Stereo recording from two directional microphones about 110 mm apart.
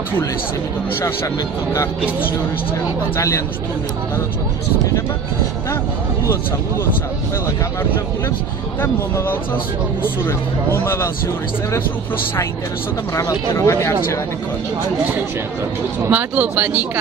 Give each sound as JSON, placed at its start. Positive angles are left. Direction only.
{"t": 1.7, "sound": "speech", "side_deg": 25}
{"t": 8.8, "sound": "speech", "side_deg": 20}
{"t": 13.1, "sound": "speech", "side_deg": 25}
{"t": 16.0, "sound": "speech", "side_deg": -15}